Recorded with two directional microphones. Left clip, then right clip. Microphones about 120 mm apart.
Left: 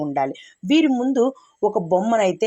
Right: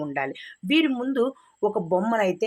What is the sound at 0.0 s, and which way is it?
Speech, 35° left (ahead or behind).